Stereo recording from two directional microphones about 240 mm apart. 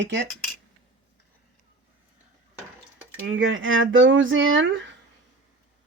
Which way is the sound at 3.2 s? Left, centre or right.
Right.